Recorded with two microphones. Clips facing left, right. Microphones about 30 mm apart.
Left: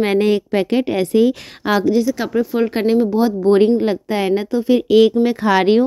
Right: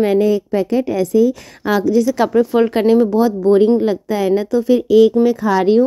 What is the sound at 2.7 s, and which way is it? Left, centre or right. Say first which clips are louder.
Speech: right 3 dB; centre.